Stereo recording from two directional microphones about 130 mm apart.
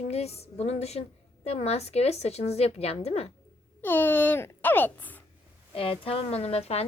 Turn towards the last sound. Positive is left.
turn(degrees=55)  # may be behind; listen again after turning